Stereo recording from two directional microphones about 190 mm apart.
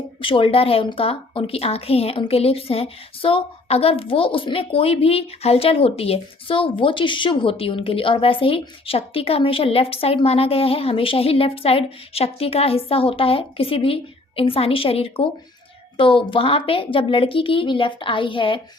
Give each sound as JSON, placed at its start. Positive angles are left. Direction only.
{"t": 0.2, "sound": "a woman's voice", "side_deg": 25}